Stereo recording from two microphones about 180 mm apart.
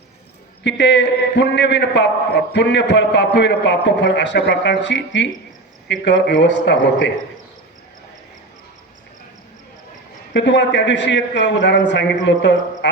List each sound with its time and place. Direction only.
0.6 s a man's voice: 80° left
10.3 s a man's voice: 80° left